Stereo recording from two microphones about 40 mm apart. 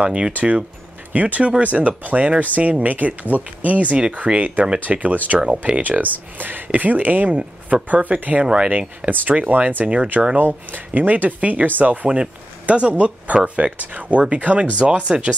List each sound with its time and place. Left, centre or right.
0.0 s speech: right
0.3 s speech: right
6.3 s speech: right